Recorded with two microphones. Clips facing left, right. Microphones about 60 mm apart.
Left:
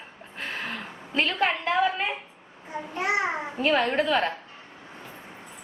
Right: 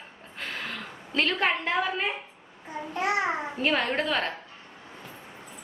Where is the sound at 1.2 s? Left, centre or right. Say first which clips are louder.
Left 1 dB; centre.